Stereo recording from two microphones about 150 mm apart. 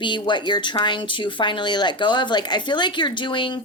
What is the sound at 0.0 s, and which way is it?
Speech, 30° left (ahead or behind).